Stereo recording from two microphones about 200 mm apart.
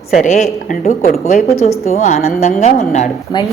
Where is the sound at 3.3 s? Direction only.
20° left (ahead or behind).